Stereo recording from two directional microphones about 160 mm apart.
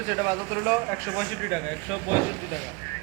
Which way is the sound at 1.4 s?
5° right (ahead or behind).